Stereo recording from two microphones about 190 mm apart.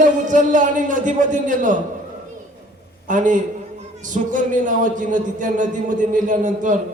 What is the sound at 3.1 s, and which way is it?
A man's voice, 40° right (ahead or behind).